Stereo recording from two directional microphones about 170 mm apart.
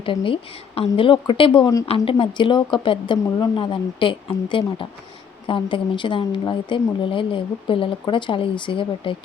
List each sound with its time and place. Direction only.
0.0 s a woman's voice: 30° left (ahead or behind)